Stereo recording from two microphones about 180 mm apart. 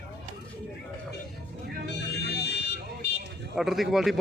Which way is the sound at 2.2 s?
70° left (ahead or behind).